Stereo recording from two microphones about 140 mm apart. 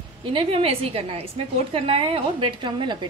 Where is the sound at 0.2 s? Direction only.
35° right (ahead or behind).